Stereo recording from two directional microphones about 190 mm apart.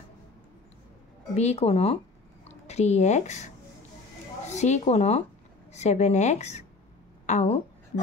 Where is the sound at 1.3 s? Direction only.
35° left (ahead or behind).